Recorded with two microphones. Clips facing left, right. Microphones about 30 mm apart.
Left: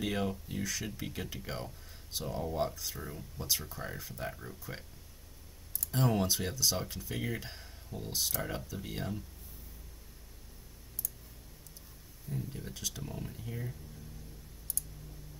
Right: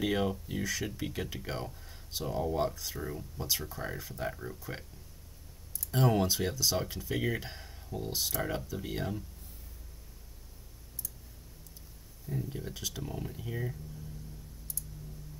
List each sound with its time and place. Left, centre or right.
0.0 s speech: centre
5.9 s speech: centre
12.3 s speech: centre
13.4 s speech: centre